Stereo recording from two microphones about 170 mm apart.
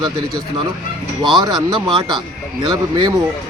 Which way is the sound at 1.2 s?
25° right (ahead or behind).